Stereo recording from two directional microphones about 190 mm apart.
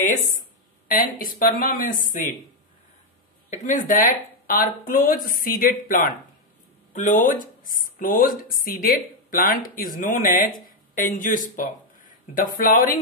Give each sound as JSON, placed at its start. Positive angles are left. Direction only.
{"t": 0.9, "sound": "speech", "side_deg": 45}
{"t": 3.4, "sound": "speech", "side_deg": 40}